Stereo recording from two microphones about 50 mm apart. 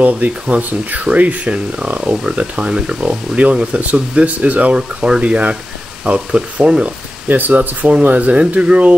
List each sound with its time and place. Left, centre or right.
0.0 s speech: right
4.7 s speech: centre
7.2 s speech: right